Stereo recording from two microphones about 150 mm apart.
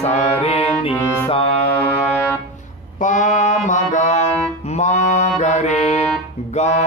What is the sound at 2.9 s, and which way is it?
Music, 55° left (ahead or behind).